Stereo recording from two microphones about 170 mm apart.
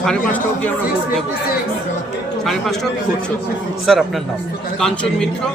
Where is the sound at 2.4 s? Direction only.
Centre (ahead or behind).